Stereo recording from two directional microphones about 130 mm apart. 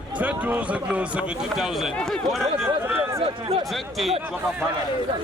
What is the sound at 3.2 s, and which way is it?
Speech, 40° right (ahead or behind).